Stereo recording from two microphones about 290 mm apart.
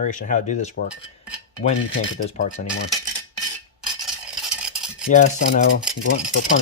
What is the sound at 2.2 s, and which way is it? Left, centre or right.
Speech, left.